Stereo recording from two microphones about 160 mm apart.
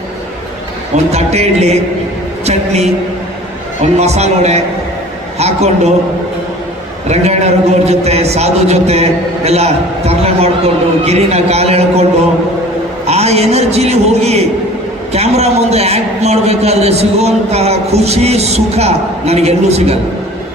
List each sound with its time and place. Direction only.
0.9 s speech: 40° right (ahead or behind)
2.5 s a sound: 45° right (ahead or behind)
3.9 s a man's voice: 45° right (ahead or behind)
7.1 s a man's voice: 45° right (ahead or behind)
13.1 s a man's voice: 40° right (ahead or behind)